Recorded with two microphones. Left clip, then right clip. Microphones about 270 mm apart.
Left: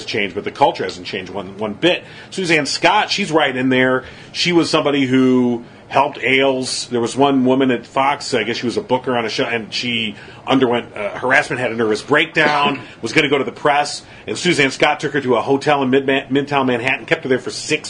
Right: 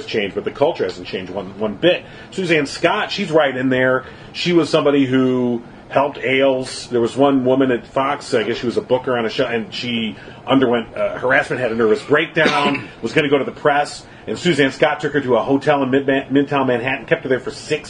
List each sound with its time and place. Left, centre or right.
0.1 s speech: left
2.4 s speech: left